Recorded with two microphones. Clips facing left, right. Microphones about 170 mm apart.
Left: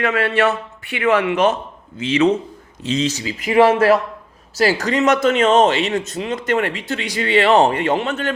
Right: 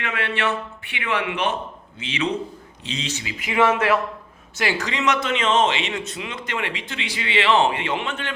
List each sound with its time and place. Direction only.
0.0 s speech: 40° left (ahead or behind)